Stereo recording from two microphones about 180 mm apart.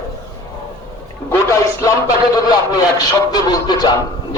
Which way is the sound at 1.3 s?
20° left (ahead or behind).